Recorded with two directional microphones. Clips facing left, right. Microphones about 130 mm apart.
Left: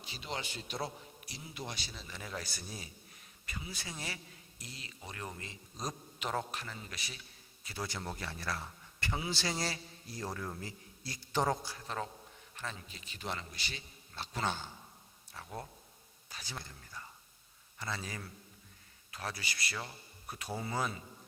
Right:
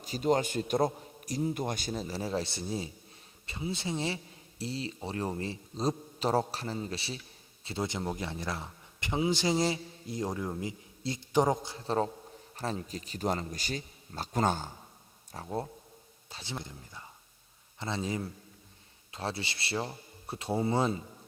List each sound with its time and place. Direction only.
0.0 s a man's voice: 45° right (ahead or behind); by 21.0 s 25° right (ahead or behind)